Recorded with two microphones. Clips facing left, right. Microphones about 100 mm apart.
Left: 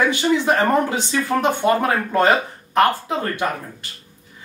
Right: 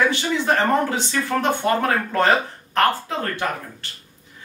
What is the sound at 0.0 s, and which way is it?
Speech, 15° left (ahead or behind).